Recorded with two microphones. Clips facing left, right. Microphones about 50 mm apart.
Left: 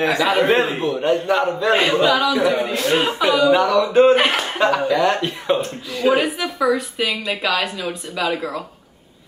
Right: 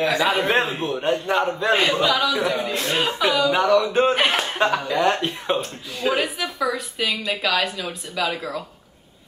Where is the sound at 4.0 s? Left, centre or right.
Centre.